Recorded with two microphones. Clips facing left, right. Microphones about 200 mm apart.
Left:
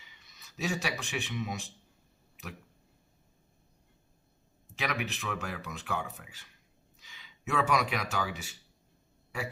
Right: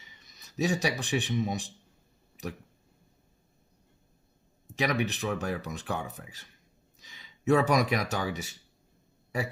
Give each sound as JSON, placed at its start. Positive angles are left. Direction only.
{"t": 0.2, "sound": "speech", "side_deg": -40}
{"t": 4.8, "sound": "speech", "side_deg": -40}
{"t": 7.0, "sound": "a sound", "side_deg": -40}
{"t": 8.1, "sound": "speech", "side_deg": -40}